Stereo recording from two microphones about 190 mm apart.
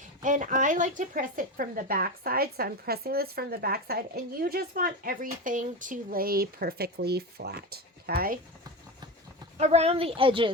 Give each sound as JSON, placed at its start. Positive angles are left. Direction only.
{"t": 0.2, "sound": "a woman's voice", "side_deg": -40}
{"t": 9.6, "sound": "a woman's voice", "side_deg": -35}